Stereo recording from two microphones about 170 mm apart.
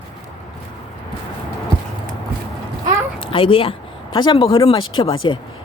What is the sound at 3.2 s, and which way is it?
Speech, 30° left (ahead or behind).